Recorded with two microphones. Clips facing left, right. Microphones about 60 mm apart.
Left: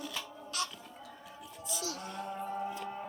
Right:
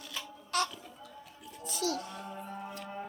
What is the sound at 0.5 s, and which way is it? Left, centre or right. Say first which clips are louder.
Livestock: right 6 dB; right.